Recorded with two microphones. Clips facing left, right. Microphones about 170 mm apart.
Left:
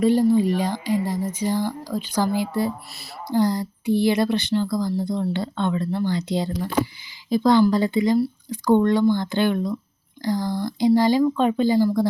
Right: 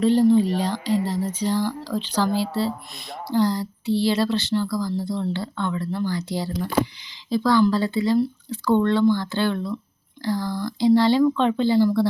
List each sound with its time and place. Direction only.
0.0 s speech: 10° left (ahead or behind)